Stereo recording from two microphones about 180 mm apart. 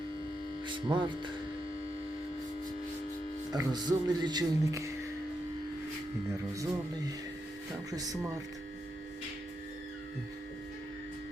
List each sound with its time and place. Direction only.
0.7 s speech: 25° right (ahead or behind)
3.5 s speech: 20° right (ahead or behind)
7.9 s speech: 20° right (ahead or behind)